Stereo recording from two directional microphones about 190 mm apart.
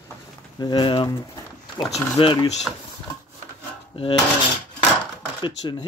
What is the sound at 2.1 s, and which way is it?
Speech, 25° left (ahead or behind).